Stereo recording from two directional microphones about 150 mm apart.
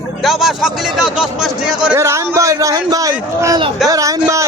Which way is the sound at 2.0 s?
20° right (ahead or behind).